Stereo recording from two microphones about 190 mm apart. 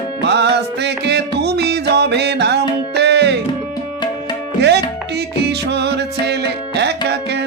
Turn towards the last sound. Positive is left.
turn(degrees=-60)  # may be behind; listen again after turning